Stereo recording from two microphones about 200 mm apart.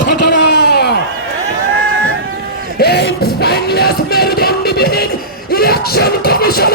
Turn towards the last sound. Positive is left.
turn(degrees=50)  # may be behind; listen again after turning